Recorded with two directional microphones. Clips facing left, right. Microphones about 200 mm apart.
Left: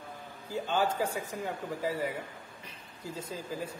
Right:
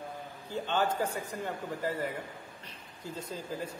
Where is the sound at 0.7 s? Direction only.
5° left (ahead or behind).